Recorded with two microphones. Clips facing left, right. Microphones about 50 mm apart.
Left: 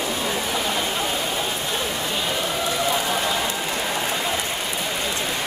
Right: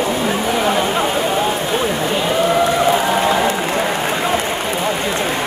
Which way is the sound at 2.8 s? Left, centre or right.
Right.